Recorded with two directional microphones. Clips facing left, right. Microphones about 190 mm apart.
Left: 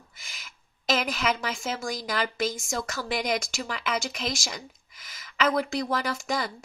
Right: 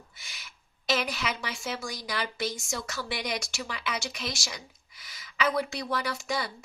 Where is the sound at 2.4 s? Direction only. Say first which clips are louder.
Left 4 dB; 90° left.